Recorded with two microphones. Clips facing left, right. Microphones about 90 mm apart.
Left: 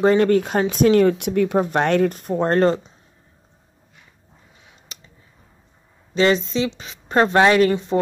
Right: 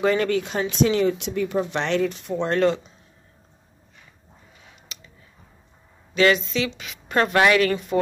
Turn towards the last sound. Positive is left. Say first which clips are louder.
# left 3 dB
turn(degrees=30)  # may be behind; listen again after turning